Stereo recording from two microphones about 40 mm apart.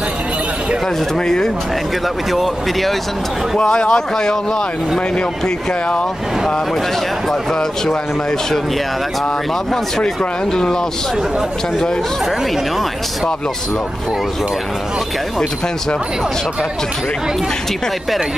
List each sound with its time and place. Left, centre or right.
1.1 s speech: centre
2.3 s speech: centre
3.5 s a man's voice: left
7.5 s speech: centre
9.7 s speech: centre